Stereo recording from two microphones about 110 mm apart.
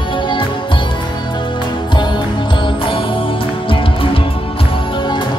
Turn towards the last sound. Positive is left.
turn(degrees=55)  # may be behind; listen again after turning